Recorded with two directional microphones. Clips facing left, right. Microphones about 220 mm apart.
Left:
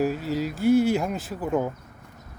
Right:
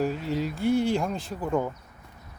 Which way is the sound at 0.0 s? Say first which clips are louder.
Left 2 dB; 5° left (ahead or behind).